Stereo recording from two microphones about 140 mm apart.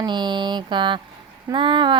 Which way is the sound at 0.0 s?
30° right (ahead or behind).